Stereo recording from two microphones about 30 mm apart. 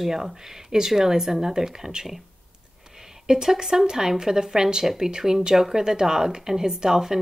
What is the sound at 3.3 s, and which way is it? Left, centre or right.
A woman's voice, centre.